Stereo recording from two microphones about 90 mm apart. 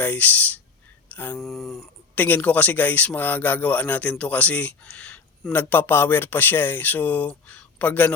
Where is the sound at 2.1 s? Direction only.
20° left (ahead or behind).